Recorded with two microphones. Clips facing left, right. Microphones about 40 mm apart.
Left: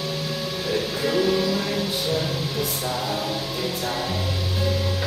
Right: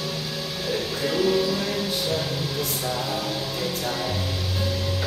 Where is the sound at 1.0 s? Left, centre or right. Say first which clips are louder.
Even; centre.